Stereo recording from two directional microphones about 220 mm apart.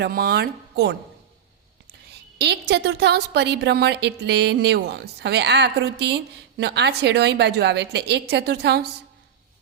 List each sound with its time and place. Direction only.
0.0 s a woman's voice: 45° right (ahead or behind)
2.4 s a woman's voice: 50° right (ahead or behind)